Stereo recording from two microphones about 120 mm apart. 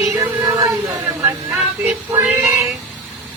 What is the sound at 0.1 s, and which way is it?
Music, 25° right (ahead or behind).